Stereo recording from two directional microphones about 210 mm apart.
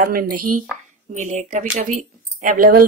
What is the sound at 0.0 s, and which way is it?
A woman's voice, 45° right (ahead or behind).